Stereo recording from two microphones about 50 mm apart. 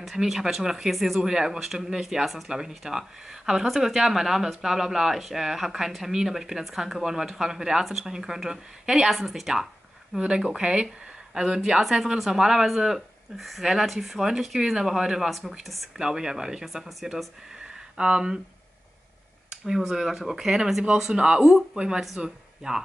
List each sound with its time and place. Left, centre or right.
0.0 s speech: centre
16.0 s speech: centre
17.9 s speech: centre
19.5 s a sound: centre
19.8 s speech: centre